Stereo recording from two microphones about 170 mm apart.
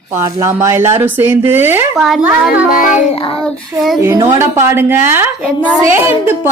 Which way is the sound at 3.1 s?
30° left (ahead or behind).